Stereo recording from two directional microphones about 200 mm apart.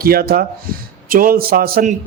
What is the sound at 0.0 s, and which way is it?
A man's voice, 50° right (ahead or behind).